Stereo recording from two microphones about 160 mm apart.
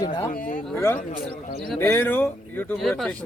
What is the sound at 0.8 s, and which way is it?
A man's voice, 15° left (ahead or behind).